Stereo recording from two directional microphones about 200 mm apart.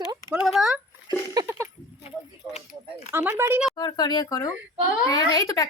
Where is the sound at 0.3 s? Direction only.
5° right (ahead or behind).